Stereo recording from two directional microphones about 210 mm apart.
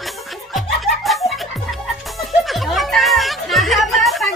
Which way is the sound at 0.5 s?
Centre (ahead or behind).